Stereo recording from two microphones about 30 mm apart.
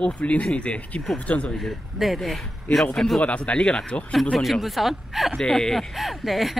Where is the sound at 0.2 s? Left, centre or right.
Left.